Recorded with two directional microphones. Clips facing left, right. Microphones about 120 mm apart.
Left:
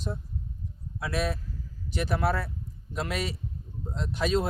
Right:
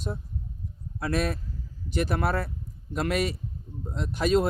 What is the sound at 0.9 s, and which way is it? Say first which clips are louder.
A man's voice: right 2 dB; 50° right (ahead or behind).